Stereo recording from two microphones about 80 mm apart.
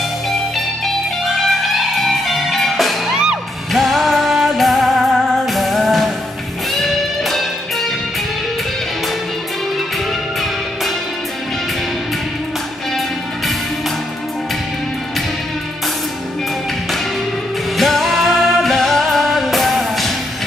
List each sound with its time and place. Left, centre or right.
1.3 s music: centre
17.7 s music: centre